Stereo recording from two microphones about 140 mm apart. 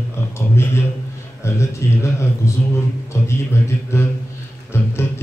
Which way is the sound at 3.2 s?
20° left (ahead or behind).